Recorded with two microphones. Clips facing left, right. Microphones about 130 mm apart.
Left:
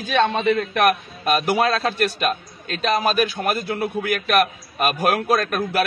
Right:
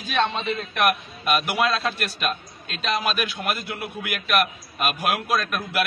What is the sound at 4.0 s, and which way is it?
A man's voice, 45° left (ahead or behind).